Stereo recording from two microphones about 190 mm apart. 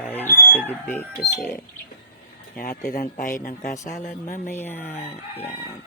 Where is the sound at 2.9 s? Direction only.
45° left (ahead or behind).